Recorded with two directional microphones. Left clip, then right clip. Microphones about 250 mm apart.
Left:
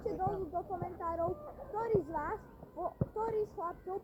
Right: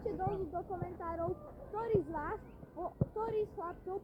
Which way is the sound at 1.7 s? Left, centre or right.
Centre.